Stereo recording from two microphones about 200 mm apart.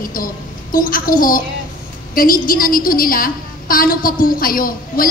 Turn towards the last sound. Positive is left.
turn(degrees=45)  # may be behind; listen again after turning